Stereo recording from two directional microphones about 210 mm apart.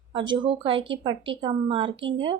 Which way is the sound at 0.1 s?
25° right (ahead or behind).